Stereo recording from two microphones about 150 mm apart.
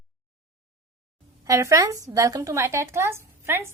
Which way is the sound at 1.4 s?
20° right (ahead or behind).